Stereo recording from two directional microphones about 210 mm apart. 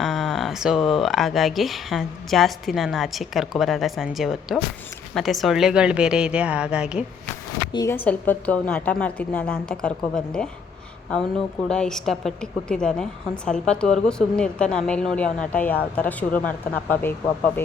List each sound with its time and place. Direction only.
0.0 s a woman's voice: centre (ahead or behind)
7.7 s a woman's voice: 20° left (ahead or behind)
8.0 s a woman's voice: 5° left (ahead or behind)
11.7 s a woman's voice: 5° left (ahead or behind)